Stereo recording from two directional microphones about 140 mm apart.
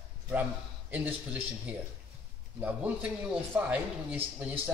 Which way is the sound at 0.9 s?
10° right (ahead or behind).